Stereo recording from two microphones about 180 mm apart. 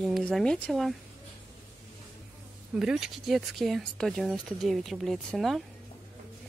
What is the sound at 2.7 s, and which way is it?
Speech, 5° right (ahead or behind).